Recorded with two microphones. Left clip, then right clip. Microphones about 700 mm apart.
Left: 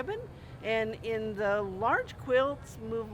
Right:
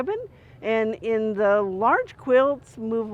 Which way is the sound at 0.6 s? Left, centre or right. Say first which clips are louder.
Right 7 dB; right.